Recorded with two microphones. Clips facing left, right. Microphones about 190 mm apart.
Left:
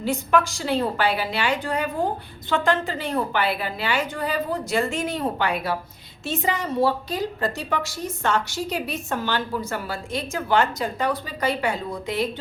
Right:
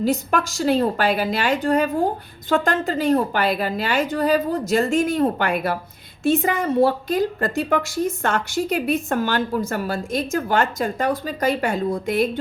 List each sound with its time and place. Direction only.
0.0 s a woman's voice: 40° right (ahead or behind)